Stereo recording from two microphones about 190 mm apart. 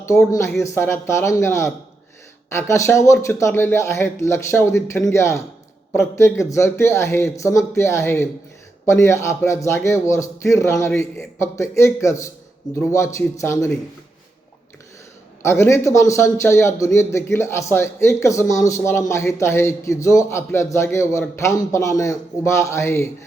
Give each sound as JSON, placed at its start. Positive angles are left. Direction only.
{"t": 0.3, "sound": "a man's voice", "side_deg": 15}
{"t": 15.4, "sound": "a man's voice", "side_deg": 15}